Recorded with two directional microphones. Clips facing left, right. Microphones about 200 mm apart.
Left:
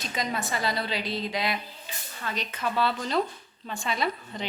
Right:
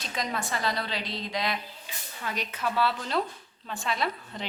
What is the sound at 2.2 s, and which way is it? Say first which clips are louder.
A woman's voice: even; 10° right (ahead or behind).